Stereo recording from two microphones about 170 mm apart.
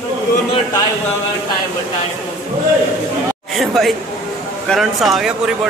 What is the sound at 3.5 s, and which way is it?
Speech, centre (ahead or behind).